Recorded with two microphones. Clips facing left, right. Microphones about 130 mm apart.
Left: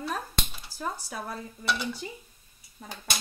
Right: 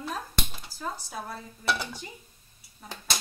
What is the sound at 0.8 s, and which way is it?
Speech, 60° left (ahead or behind).